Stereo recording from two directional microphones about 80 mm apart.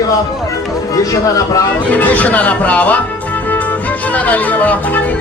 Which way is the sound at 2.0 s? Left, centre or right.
Left.